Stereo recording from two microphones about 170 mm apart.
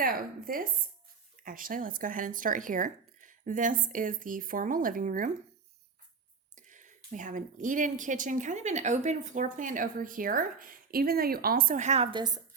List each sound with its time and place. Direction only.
0.0 s a woman's voice: 55° right (ahead or behind)
6.6 s speech: 50° right (ahead or behind)
12.1 s a woman's voice: 25° right (ahead or behind)